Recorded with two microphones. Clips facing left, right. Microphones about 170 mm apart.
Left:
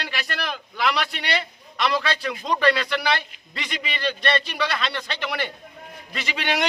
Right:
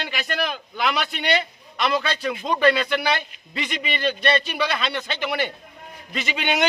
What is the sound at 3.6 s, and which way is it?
A man's voice, 5° right (ahead or behind).